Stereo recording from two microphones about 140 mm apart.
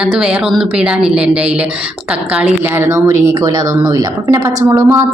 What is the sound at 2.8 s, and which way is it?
A woman's voice, 20° right (ahead or behind).